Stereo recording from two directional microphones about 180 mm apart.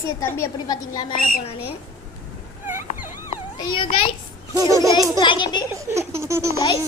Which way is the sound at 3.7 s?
30° left (ahead or behind).